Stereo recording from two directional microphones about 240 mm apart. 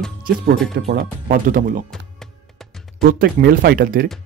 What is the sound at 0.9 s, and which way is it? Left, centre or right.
Speech, right.